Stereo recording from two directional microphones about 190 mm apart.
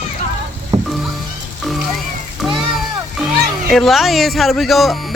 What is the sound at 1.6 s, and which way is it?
Music, centre (ahead or behind).